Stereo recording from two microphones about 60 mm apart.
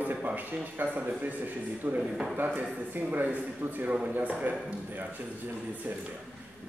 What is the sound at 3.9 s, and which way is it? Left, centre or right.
Speech, right.